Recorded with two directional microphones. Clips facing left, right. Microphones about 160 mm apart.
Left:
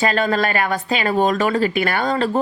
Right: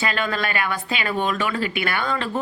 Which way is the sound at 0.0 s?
40° left (ahead or behind).